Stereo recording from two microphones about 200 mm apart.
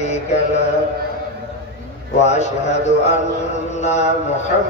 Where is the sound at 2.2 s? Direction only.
35° left (ahead or behind).